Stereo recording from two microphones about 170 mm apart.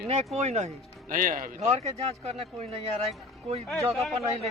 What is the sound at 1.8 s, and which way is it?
Speech, 40° right (ahead or behind).